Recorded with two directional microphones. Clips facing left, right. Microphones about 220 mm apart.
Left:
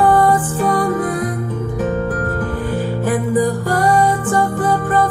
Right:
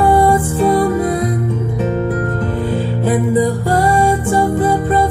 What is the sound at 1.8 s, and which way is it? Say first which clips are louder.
Music: right 1 dB; 25° right (ahead or behind).